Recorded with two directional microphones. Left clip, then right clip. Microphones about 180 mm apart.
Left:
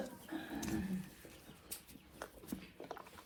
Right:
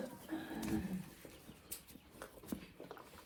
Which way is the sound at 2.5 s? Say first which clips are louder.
Right 3 dB; 45° right (ahead or behind).